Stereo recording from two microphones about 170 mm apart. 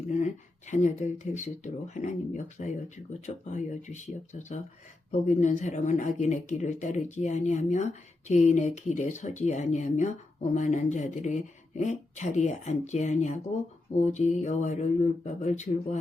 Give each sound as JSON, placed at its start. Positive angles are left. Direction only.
{"t": 0.7, "sound": "speech", "side_deg": 45}